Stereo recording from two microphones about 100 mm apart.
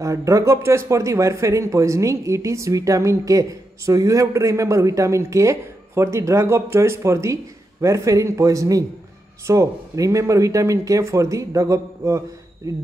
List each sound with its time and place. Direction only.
0.0 s speech: 30° right (ahead or behind)